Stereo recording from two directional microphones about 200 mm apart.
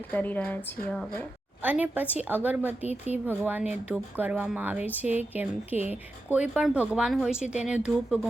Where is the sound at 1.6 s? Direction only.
10° right (ahead or behind).